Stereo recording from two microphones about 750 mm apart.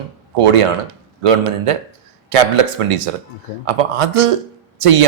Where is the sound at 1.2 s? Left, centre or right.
Right.